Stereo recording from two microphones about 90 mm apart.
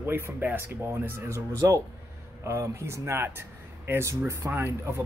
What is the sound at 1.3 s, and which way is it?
Speech, 35° right (ahead or behind).